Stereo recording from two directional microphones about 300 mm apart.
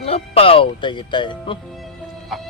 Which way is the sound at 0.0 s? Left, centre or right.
Centre.